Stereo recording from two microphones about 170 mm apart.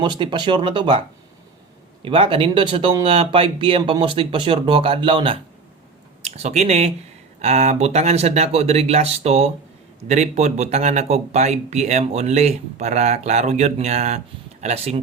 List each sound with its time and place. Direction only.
0.0 s speech: 25° right (ahead or behind)